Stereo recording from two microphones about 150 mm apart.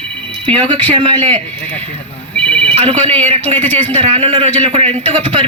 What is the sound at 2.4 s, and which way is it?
Telephone, 5° left (ahead or behind).